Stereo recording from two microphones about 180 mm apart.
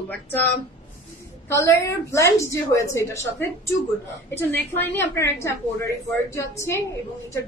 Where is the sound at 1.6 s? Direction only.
15° left (ahead or behind).